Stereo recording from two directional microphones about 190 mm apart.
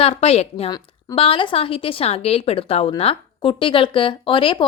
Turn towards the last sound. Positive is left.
turn(degrees=25)  # may be behind; listen again after turning